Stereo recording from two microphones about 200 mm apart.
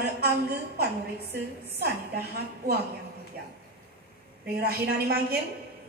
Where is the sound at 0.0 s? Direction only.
55° right (ahead or behind).